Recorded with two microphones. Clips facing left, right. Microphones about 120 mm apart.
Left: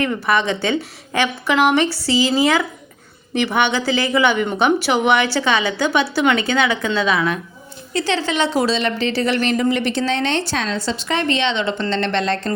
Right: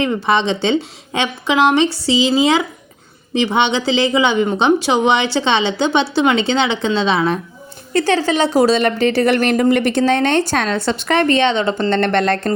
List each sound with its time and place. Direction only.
0.0 s a woman's voice: 20° right (ahead or behind)
7.9 s a woman's voice: 45° right (ahead or behind)